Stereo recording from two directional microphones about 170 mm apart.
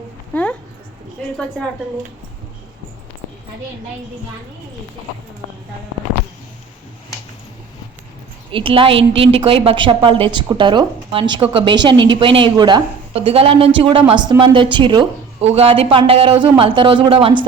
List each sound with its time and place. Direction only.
0.3 s a sound: 10° left (ahead or behind)
1.4 s a woman's voice: 5° left (ahead or behind)
8.5 s a woman's voice: 30° right (ahead or behind)